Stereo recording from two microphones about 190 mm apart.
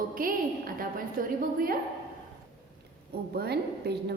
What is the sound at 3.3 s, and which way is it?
Speech, 60° right (ahead or behind).